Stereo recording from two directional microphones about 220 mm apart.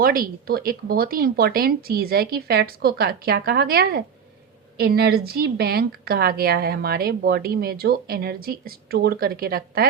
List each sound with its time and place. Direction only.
0.0 s a woman's voice: 40° right (ahead or behind)